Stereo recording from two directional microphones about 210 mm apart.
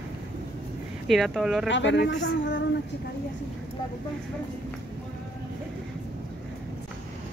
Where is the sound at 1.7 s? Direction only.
60° left (ahead or behind).